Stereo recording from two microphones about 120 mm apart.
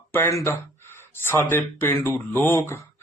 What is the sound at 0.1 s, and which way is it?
A man's voice, 20° left (ahead or behind).